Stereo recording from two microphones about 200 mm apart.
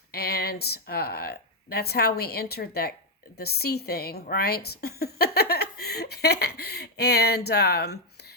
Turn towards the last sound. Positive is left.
turn(degrees=55)  # may be behind; listen again after turning